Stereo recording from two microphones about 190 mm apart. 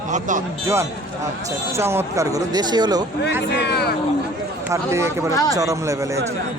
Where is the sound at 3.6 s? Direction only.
60° left (ahead or behind).